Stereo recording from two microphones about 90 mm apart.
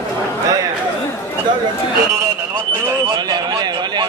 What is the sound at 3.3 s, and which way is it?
Speech, 50° right (ahead or behind).